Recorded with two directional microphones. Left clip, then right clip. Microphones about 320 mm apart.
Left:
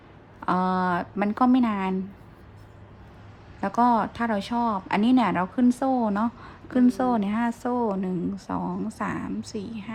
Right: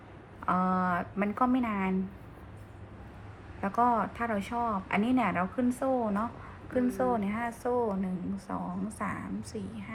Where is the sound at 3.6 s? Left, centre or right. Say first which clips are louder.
Left 5 dB; left.